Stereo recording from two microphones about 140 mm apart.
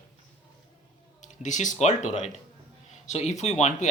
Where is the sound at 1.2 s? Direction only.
60° left (ahead or behind).